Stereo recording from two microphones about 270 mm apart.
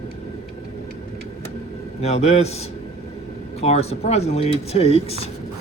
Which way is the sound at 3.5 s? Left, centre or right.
Left.